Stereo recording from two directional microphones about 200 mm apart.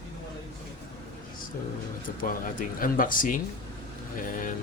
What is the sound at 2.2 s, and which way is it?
Speech, 45° left (ahead or behind).